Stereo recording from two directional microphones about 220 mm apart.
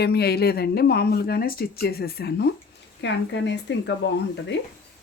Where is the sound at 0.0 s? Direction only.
45° left (ahead or behind).